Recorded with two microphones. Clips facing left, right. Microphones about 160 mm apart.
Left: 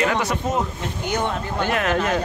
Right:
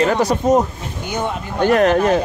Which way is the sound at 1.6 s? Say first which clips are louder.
Right 9 dB; 40° right (ahead or behind).